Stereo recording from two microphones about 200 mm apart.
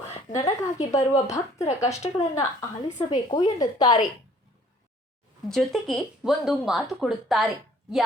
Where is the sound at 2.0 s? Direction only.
35° left (ahead or behind).